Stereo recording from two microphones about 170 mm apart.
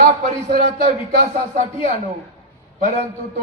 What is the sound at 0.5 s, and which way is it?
A man's voice, 55° right (ahead or behind).